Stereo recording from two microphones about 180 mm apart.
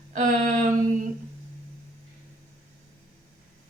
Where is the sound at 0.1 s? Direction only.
50° right (ahead or behind).